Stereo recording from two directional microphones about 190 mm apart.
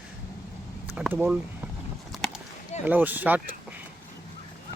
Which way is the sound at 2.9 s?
10° right (ahead or behind).